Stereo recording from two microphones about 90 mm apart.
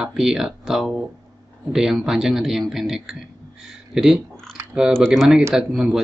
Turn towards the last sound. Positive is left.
turn(degrees=-5)  # may be behind; listen again after turning